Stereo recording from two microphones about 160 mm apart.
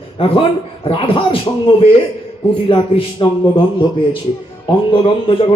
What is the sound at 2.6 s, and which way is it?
Speech, 35° left (ahead or behind).